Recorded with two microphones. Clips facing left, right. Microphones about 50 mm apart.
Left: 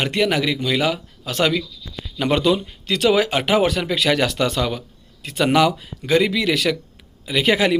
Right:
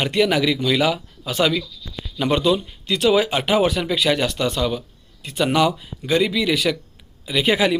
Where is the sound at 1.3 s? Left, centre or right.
Left.